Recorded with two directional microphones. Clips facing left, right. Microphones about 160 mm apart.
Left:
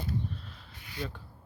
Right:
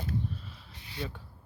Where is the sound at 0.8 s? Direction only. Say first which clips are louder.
Even; 30° right (ahead or behind).